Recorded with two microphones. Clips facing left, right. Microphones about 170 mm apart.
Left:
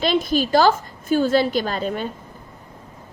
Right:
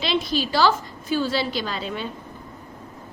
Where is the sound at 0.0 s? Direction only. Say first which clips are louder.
Left 4 dB; 50° left (ahead or behind).